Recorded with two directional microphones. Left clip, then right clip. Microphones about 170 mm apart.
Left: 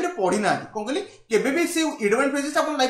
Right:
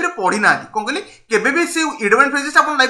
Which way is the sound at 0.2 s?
35° left (ahead or behind).